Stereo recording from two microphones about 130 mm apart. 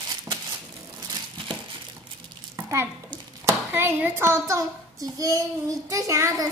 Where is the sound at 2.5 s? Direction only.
20° right (ahead or behind).